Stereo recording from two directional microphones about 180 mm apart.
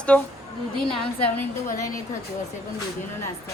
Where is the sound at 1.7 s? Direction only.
15° left (ahead or behind).